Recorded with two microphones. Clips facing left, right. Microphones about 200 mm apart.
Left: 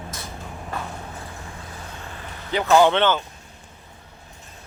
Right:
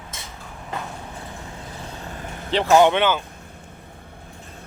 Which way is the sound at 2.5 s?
30° right (ahead or behind).